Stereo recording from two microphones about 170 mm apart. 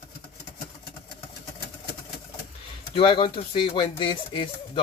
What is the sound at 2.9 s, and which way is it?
Speech, 30° left (ahead or behind).